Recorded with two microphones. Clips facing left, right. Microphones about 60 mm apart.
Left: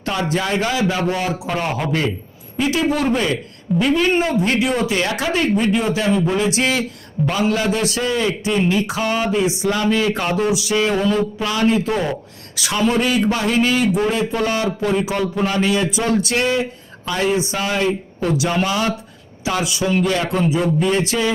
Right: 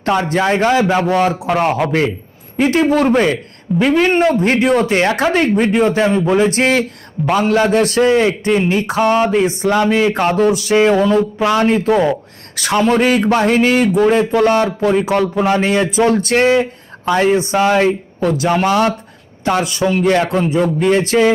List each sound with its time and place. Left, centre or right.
0.0 s speech: right
1.4 s speech: right
2.6 s speech: right
8.9 s speech: right
15.0 s speech: right
15.4 s speech: right